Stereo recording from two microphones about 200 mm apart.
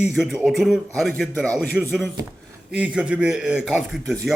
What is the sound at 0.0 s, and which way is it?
A man's voice, centre (ahead or behind).